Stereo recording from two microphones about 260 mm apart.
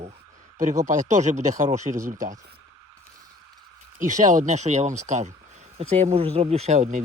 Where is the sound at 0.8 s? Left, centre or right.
Right.